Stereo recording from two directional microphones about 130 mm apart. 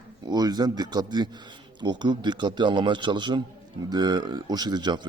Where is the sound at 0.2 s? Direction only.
30° right (ahead or behind).